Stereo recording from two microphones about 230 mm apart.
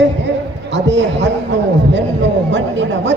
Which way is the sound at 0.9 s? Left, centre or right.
Right.